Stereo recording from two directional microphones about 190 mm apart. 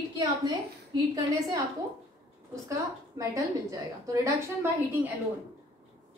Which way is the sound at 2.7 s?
15° right (ahead or behind).